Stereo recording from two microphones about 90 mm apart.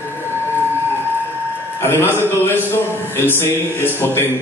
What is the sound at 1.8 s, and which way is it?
A man's voice, 25° left (ahead or behind).